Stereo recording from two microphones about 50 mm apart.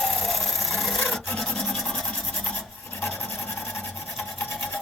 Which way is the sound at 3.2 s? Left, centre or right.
Left.